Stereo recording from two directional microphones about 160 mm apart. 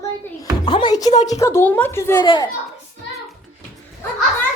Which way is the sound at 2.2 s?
30° left (ahead or behind).